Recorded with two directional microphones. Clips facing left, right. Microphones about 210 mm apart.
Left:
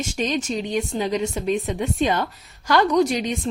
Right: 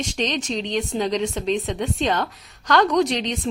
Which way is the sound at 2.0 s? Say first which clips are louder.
Left 1 dB; 10° left (ahead or behind).